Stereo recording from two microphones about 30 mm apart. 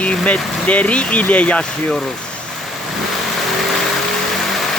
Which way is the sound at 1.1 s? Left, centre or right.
Left.